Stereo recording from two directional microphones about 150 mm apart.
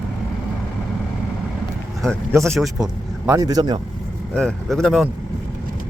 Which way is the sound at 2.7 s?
20° right (ahead or behind).